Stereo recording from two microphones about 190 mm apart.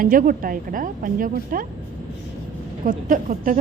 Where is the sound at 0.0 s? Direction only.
45° right (ahead or behind).